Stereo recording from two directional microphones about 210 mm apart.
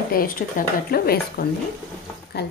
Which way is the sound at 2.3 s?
50° left (ahead or behind).